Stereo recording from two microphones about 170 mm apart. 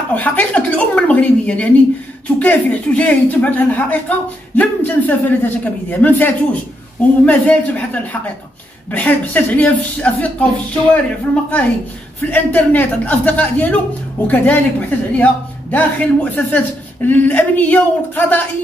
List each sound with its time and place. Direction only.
0.1 s speech: 10° left (ahead or behind)
12.3 s speech: 10° left (ahead or behind)